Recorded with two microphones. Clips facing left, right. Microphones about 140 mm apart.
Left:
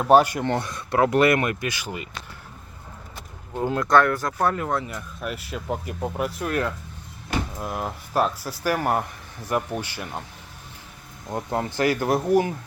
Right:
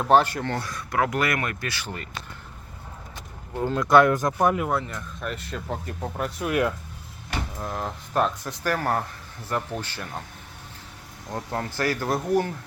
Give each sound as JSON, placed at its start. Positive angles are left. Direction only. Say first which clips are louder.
{"t": 0.0, "sound": "speech", "louder": "left 3 dB", "side_deg": 10}
{"t": 3.5, "sound": "speech", "louder": "left 1 dB", "side_deg": 10}
{"t": 3.8, "sound": "speech", "louder": "right 3 dB", "side_deg": -15}
{"t": 4.8, "sound": "speech", "louder": "left 1 dB", "side_deg": 5}
{"t": 6.5, "sound": "speech", "louder": "right 5 dB", "side_deg": -10}
{"t": 7.6, "sound": "speech", "louder": "left 1 dB", "side_deg": 10}
{"t": 11.5, "sound": "speech", "louder": "left 4 dB", "side_deg": 15}